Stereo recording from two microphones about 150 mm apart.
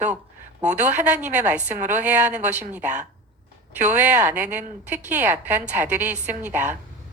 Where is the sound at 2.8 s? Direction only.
55° right (ahead or behind).